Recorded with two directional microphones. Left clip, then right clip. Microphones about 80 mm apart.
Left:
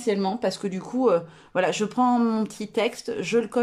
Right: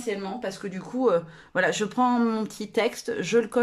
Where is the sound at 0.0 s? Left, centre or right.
Left.